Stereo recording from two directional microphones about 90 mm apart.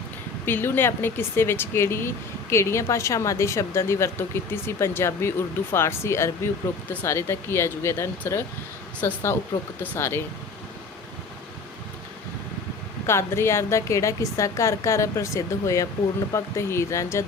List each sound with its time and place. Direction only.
0.4 s speech: 25° left (ahead or behind)
13.1 s a woman's voice: 30° left (ahead or behind)